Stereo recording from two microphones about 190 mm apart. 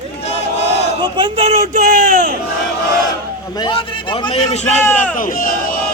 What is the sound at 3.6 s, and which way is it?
A man's voice, 25° left (ahead or behind).